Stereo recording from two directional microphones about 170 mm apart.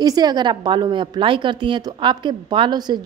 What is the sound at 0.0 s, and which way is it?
A woman's voice, 20° right (ahead or behind).